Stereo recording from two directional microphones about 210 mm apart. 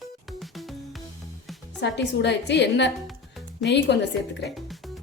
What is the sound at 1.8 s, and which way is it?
A woman's voice, 55° left (ahead or behind).